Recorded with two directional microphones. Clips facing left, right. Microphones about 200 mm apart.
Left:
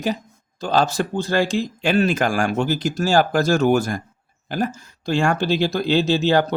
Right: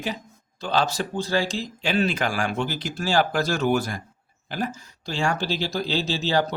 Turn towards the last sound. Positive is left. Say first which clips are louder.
# left 6 dB
turn(degrees=55)  # may be behind; listen again after turning